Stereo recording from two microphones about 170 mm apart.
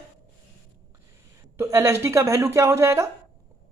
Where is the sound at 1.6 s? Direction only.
15° right (ahead or behind).